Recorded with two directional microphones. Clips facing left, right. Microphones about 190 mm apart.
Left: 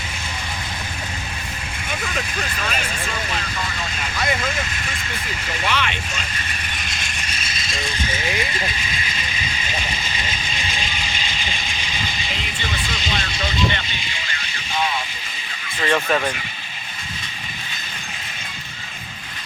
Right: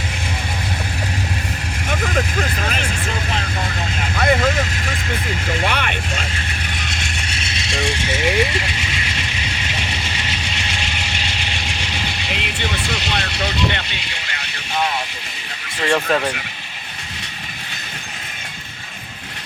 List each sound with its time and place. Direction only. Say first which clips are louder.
1.9 s vehicle: right 7 dB; 50° right (ahead or behind)
4.2 s vehicle: right 7 dB; 55° right (ahead or behind)
5.5 s vehicle: right 2 dB; 55° right (ahead or behind)
7.0 s vehicle: right 4 dB; 75° right (ahead or behind)